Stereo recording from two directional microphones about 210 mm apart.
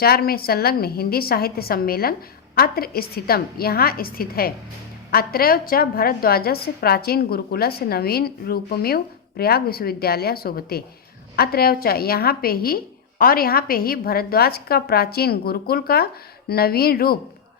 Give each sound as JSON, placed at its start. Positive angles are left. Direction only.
{"t": 0.0, "sound": "a woman's voice", "side_deg": 45}